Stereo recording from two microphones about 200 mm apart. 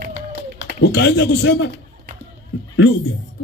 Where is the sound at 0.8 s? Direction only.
60° left (ahead or behind).